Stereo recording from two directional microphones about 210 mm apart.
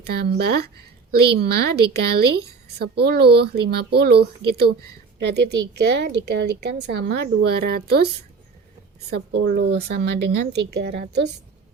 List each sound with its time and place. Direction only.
0.1 s a woman's voice: 50° right (ahead or behind)